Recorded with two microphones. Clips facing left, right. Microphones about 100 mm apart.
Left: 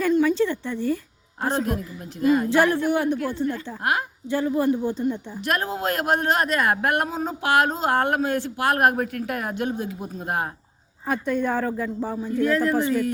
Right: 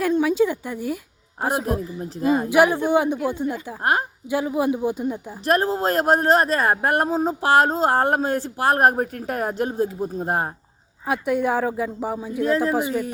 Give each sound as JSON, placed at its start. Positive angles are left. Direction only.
{"t": 0.0, "sound": "a woman's voice", "side_deg": -10}
{"t": 2.2, "sound": "speech", "side_deg": -25}
{"t": 2.5, "sound": "a woman's voice", "side_deg": -15}
{"t": 5.5, "sound": "speech", "side_deg": -35}
{"t": 11.0, "sound": "a woman's voice", "side_deg": -10}